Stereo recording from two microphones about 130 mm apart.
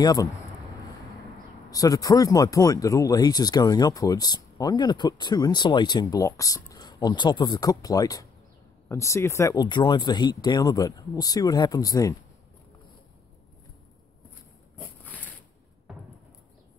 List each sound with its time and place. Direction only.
0.0 s speech: 30° left (ahead or behind)
1.7 s speech: 30° left (ahead or behind)
14.8 s a sound: 15° left (ahead or behind)